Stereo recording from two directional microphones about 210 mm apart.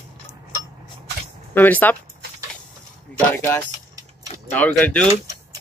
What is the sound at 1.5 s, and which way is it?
Speech, 10° left (ahead or behind).